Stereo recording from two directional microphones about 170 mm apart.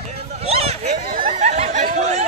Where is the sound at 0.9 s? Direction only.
60° right (ahead or behind); by 2.3 s 45° right (ahead or behind).